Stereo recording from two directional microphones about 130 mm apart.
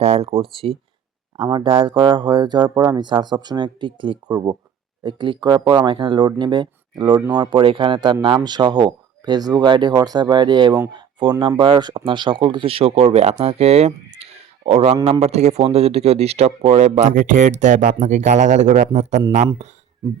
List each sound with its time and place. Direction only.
0.0 s speech: 55° right (ahead or behind)
0.4 s speech: 45° right (ahead or behind); by 19.2 s 65° right (ahead or behind)